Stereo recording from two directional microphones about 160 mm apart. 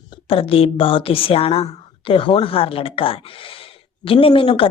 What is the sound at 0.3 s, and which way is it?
A woman's voice, 35° left (ahead or behind).